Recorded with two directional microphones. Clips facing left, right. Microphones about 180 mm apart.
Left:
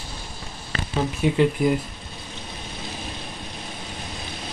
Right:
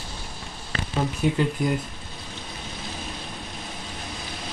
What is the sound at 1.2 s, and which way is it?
Speech, centre (ahead or behind).